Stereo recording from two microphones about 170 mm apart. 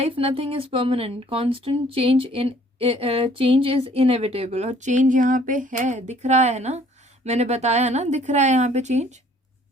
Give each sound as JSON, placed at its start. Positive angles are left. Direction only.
{"t": 0.0, "sound": "speech", "side_deg": -35}